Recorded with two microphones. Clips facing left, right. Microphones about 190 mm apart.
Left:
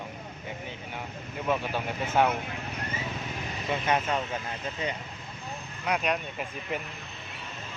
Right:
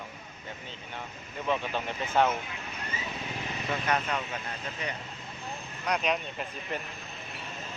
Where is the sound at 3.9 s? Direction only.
25° left (ahead or behind).